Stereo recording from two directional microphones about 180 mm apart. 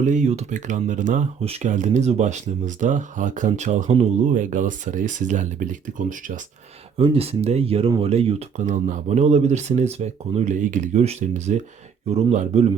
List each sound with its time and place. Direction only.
0.0 s speech: 40° right (ahead or behind)
7.0 s speech: 30° right (ahead or behind)